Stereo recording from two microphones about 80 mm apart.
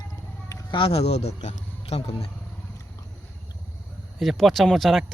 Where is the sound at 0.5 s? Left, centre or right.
Left.